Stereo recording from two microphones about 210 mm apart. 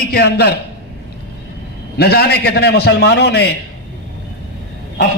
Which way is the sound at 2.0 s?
50° left (ahead or behind).